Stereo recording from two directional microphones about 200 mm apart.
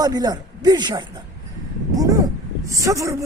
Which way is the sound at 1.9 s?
15° right (ahead or behind).